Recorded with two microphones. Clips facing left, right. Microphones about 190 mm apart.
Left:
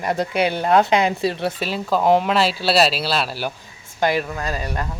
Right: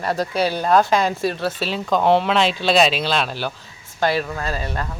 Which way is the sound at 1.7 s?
5° left (ahead or behind).